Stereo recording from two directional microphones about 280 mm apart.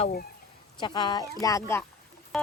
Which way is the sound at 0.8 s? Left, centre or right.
Centre.